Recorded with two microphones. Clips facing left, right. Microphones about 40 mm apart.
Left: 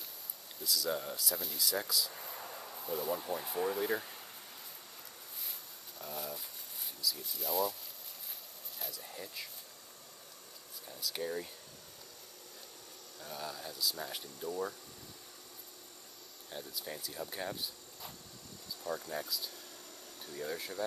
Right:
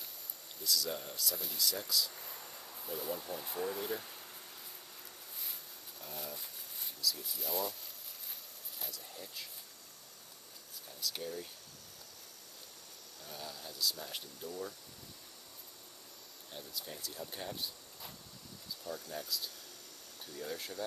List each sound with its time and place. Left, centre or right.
0.6 s speech: centre
2.8 s speech: centre
3.2 s speech: centre
5.4 s a sound: centre
8.7 s vehicle: centre
9.1 s speech: centre
11.0 s speech: centre
13.2 s speech: centre
14.5 s speech: centre
16.4 s speech: centre
18.9 s speech: centre